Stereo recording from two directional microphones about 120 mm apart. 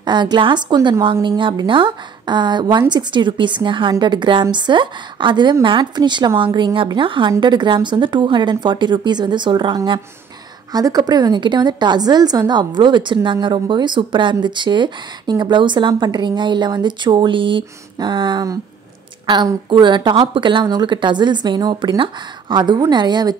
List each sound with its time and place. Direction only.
0.0 s a woman's voice: 40° right (ahead or behind)